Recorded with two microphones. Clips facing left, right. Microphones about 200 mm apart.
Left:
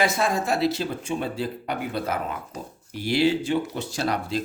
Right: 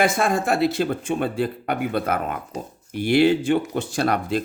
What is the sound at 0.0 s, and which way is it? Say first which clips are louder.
Speech: right 3 dB; 50° right (ahead or behind).